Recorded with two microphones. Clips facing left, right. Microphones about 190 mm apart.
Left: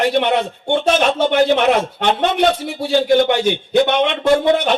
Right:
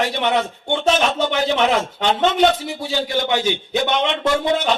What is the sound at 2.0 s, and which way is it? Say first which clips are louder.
A man's voice: right 1 dB; 55° left (ahead or behind).